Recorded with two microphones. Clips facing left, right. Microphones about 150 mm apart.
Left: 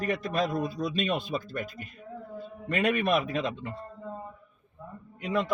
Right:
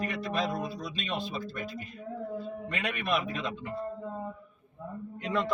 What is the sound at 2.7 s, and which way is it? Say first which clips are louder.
Speech: left 7 dB; 45° left (ahead or behind).